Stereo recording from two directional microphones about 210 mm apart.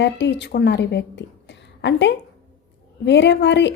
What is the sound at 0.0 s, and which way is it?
Speech, 55° left (ahead or behind).